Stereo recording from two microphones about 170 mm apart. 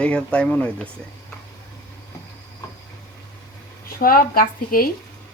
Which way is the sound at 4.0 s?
60° left (ahead or behind).